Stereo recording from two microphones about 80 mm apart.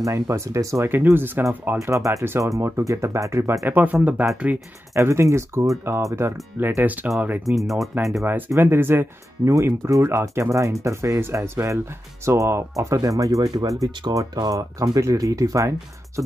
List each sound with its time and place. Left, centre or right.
0.0 s speech: right
0.9 s speech: right
1.8 s speech: right
4.9 s speech: right
6.8 s speech: right
7.4 s speech: centre
8.5 s speech: right